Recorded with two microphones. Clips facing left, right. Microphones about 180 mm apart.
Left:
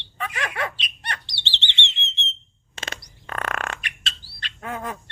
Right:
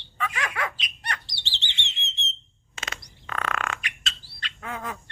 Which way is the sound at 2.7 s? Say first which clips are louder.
Left 2 dB; 30° left (ahead or behind).